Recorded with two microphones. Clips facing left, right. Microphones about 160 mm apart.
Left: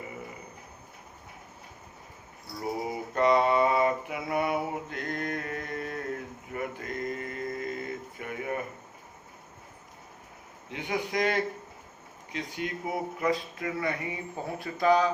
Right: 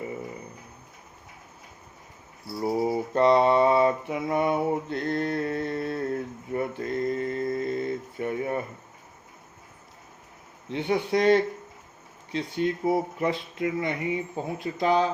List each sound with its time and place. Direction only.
2.6 s mantra: 35° right (ahead or behind)
10.7 s speech: 35° right (ahead or behind)